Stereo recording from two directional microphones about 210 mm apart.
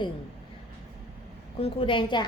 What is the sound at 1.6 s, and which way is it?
Speech, 25° left (ahead or behind).